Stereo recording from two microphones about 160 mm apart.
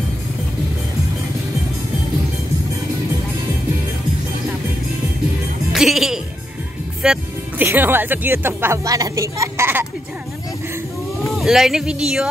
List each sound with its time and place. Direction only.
5.7 s music: centre (ahead or behind)
7.6 s a woman's voice: 15° right (ahead or behind)
11.2 s speech: centre (ahead or behind)